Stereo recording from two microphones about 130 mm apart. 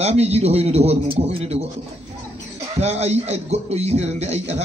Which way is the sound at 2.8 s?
55° right (ahead or behind).